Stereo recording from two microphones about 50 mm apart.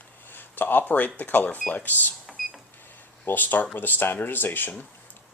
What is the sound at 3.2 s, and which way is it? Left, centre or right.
Speech, left.